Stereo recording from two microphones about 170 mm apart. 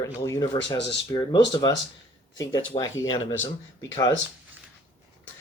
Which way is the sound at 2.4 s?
20° left (ahead or behind).